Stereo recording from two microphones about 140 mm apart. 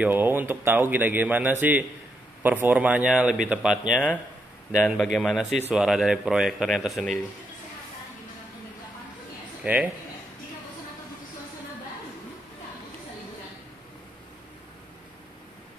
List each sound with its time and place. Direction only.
0.0 s a man's voice: 15° right (ahead or behind)
9.6 s a man's voice: 10° right (ahead or behind)